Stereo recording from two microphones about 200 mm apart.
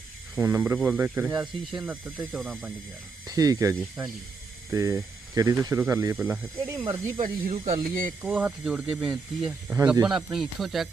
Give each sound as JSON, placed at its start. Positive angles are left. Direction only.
{"t": 0.3, "sound": "speech", "side_deg": -10}
{"t": 3.2, "sound": "speech", "side_deg": -20}
{"t": 7.2, "sound": "speech", "side_deg": -30}
{"t": 8.2, "sound": "speech", "side_deg": -5}